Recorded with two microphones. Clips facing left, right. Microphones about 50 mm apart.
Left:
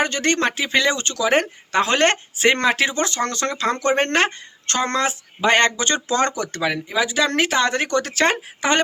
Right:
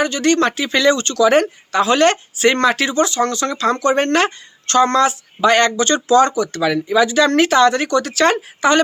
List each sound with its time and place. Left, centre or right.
0.0 s speech: left
1.7 s speech: left; by 2.9 s centre
2.9 s speech: left
3.6 s speech: left
6.1 s speech: left
6.5 s speech: left
7.6 s speech: left